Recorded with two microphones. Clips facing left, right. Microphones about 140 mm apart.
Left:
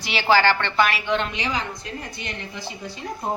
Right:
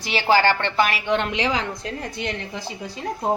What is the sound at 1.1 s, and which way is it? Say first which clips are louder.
A woman's voice: right 3 dB; 75° right (ahead or behind).